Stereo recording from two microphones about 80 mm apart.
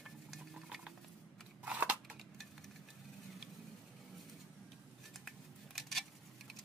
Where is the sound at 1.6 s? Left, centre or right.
Centre.